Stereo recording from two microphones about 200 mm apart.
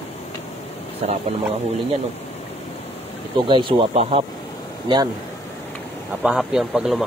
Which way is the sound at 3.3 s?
25° right (ahead or behind).